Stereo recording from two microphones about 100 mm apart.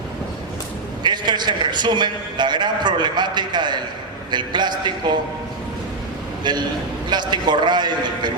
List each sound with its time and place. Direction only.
1.0 s a man's voice: 50° right (ahead or behind)
6.4 s a man's voice: 45° right (ahead or behind)